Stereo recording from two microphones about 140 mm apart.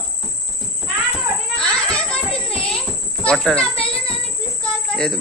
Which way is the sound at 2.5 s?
5° left (ahead or behind).